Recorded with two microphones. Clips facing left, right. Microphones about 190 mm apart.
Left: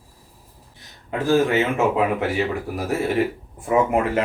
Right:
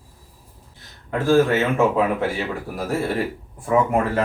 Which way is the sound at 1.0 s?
15° left (ahead or behind).